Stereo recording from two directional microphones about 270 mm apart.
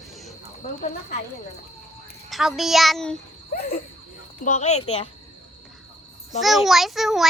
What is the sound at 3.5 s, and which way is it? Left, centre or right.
A woman's voice, left.